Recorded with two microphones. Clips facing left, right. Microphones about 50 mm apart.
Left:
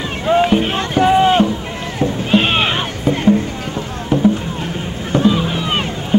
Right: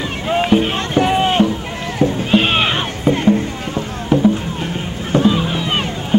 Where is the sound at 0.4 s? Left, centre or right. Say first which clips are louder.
Right 2 dB; centre.